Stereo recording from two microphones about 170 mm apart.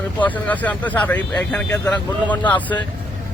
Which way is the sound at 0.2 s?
10° left (ahead or behind).